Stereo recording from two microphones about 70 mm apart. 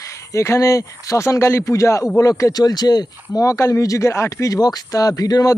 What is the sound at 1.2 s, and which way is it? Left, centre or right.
Speech, left.